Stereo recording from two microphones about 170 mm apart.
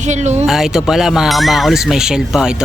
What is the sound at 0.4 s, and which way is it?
Speech, centre (ahead or behind).